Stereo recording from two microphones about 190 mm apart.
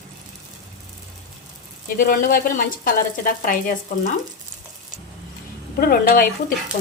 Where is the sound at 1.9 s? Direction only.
45° left (ahead or behind).